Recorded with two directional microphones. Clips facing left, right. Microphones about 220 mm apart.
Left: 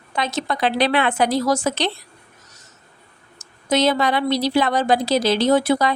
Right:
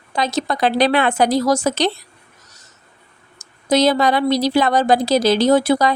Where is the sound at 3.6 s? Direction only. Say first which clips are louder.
Right 3 dB; 35° right (ahead or behind).